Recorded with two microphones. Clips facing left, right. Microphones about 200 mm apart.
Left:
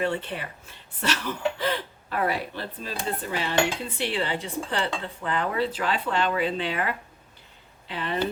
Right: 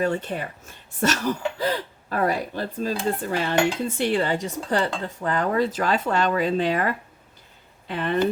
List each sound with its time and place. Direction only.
0.0 s speech: 45° right (ahead or behind)